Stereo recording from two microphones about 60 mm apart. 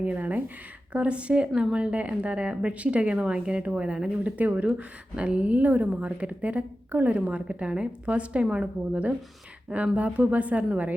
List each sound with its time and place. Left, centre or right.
0.0 s speech: right
4.4 s speech: right
4.6 s speech: centre